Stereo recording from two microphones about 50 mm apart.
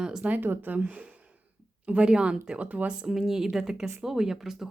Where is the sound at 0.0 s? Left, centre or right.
Centre.